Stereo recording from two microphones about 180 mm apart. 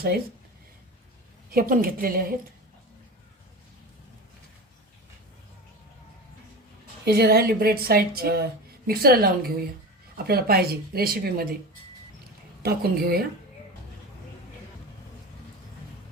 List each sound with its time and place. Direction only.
1.5 s a woman's voice: 55° right (ahead or behind)
7.0 s a woman's voice: 60° right (ahead or behind)
12.6 s a woman's voice: 55° right (ahead or behind)